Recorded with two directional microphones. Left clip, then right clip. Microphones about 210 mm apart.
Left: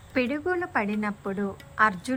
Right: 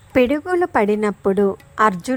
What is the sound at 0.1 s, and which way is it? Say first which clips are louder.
A woman's voice: right 10 dB; 30° right (ahead or behind).